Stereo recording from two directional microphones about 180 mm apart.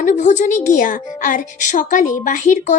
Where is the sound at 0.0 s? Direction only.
45° left (ahead or behind).